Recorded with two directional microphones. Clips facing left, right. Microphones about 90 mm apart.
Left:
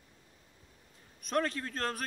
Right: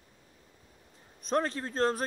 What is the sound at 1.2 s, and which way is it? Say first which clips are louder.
Speech: right 2 dB; 30° right (ahead or behind).